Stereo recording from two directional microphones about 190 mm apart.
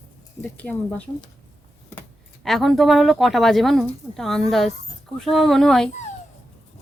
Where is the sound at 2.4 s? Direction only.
Centre (ahead or behind).